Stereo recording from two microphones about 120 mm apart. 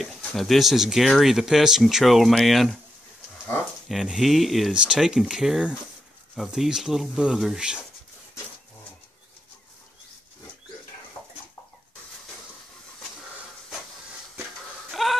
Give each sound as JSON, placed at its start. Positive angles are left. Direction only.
{"t": 0.0, "sound": "speech", "side_deg": 0}
{"t": 3.9, "sound": "speech", "side_deg": 0}
{"t": 14.9, "sound": "chicken", "side_deg": 0}